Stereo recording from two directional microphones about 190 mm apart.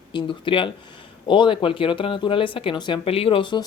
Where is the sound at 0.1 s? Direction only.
25° left (ahead or behind).